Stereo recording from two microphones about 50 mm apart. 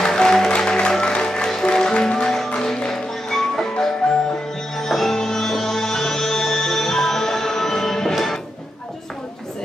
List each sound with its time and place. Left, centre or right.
0.0 s music: centre